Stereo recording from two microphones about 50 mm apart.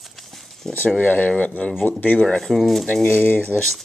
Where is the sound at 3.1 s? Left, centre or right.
Left.